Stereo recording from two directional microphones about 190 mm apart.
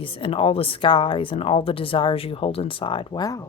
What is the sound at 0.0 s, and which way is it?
Speech, 30° left (ahead or behind).